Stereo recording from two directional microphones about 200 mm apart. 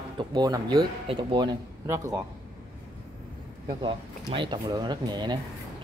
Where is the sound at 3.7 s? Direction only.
25° right (ahead or behind).